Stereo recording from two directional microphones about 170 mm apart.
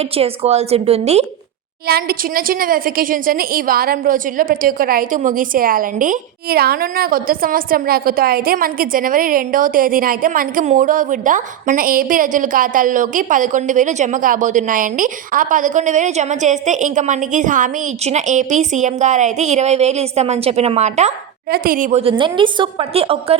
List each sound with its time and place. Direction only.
0.2 s a woman's voice: 40° right (ahead or behind)
1.9 s a woman's voice: 60° right (ahead or behind); by 21.1 s 40° right (ahead or behind)
21.5 s a woman's voice: 60° right (ahead or behind)
22.2 s a woman's voice: 30° right (ahead or behind)